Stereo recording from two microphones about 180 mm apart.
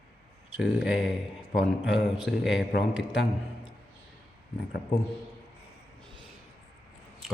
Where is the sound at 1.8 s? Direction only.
80° left.